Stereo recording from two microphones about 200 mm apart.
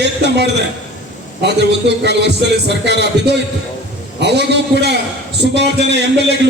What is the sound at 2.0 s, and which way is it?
A man's voice, 60° right (ahead or behind).